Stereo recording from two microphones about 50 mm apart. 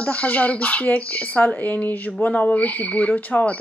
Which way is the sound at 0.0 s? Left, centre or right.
Left.